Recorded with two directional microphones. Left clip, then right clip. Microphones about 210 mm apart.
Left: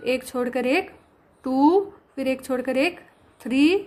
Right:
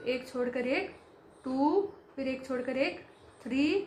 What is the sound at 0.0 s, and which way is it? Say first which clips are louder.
A woman's voice: left 8 dB; 45° left (ahead or behind).